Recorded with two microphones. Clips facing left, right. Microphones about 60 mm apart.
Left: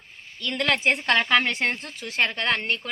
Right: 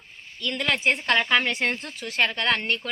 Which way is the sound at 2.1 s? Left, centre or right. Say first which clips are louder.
Right 1 dB; left.